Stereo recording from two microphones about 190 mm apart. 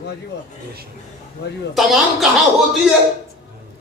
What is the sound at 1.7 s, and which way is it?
Speech, centre (ahead or behind).